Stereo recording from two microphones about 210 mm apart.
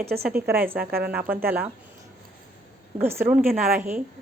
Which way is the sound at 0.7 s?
45° right (ahead or behind).